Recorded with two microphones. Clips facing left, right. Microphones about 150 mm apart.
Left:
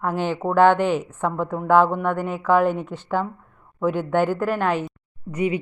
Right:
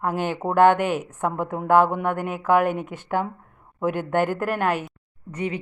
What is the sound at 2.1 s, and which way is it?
Speech, 50° right (ahead or behind).